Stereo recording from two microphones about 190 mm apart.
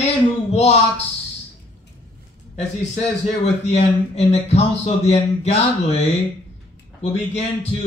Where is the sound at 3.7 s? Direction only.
35° left (ahead or behind).